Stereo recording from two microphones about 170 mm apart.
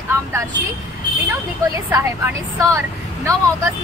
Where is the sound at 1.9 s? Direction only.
15° right (ahead or behind).